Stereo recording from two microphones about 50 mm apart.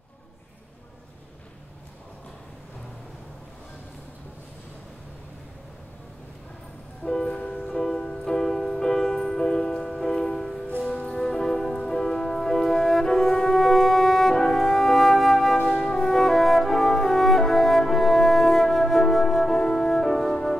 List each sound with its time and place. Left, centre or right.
7.1 s music: centre